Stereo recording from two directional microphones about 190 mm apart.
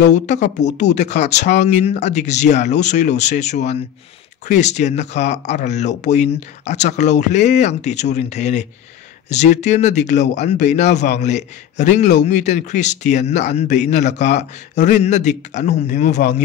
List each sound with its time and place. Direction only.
0.1 s a man's voice: 40° left (ahead or behind)